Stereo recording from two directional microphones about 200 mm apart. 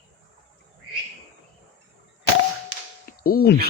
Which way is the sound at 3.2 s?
50° left (ahead or behind).